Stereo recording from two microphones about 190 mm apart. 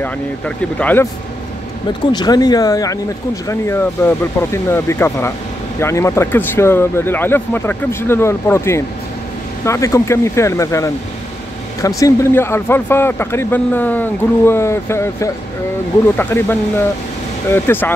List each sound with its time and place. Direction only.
0.7 s a man's voice: 10° left (ahead or behind)
2.1 s a man's voice: 20° left (ahead or behind)